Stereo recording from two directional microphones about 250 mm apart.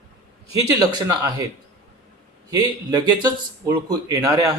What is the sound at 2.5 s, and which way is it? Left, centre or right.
Speech, centre.